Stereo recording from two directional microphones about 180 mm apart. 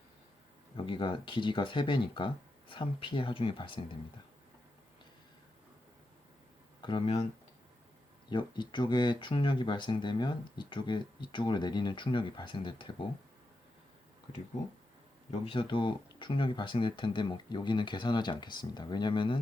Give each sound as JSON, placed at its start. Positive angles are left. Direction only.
{"t": 0.8, "sound": "speech", "side_deg": 30}
{"t": 6.8, "sound": "speech", "side_deg": 30}
{"t": 8.3, "sound": "speech", "side_deg": 25}
{"t": 15.3, "sound": "speech", "side_deg": 30}